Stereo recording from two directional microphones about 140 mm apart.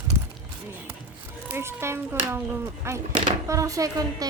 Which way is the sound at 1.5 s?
20° right (ahead or behind).